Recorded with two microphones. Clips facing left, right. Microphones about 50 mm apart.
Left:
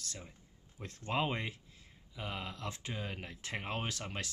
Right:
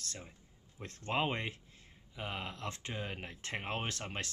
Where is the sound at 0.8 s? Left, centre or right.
Right.